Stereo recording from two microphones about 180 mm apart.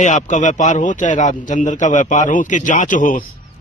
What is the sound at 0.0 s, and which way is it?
A man's voice, 45° left (ahead or behind).